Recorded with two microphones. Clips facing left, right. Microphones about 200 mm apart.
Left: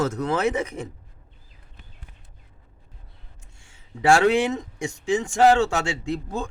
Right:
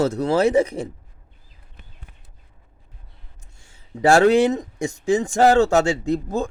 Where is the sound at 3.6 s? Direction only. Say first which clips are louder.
Right 6 dB; 40° right (ahead or behind).